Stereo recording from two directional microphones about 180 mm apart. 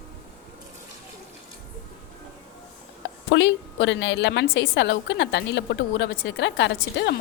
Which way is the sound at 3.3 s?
90° left.